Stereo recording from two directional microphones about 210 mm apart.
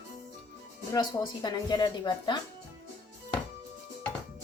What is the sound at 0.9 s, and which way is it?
A woman's voice, 20° left (ahead or behind).